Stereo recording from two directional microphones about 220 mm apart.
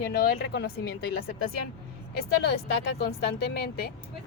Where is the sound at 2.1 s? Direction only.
50° left (ahead or behind).